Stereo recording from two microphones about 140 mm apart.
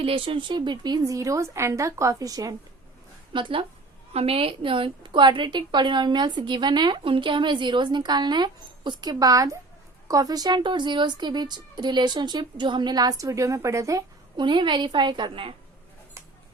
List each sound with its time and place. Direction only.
0.0 s speech: 40° right (ahead or behind)
3.3 s a woman's voice: 35° right (ahead or behind)